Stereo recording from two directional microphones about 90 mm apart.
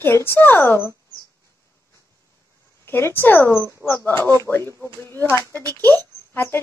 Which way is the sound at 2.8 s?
25° left (ahead or behind).